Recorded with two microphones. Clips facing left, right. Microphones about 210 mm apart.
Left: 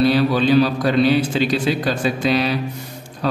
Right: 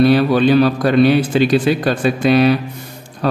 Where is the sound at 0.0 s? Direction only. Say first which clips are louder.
Right 4 dB; 55° right (ahead or behind).